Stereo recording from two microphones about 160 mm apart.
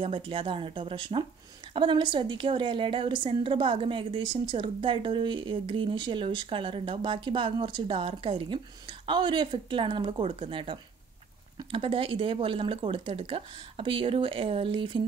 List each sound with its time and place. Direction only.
0.0 s a woman's voice: 35° right (ahead or behind)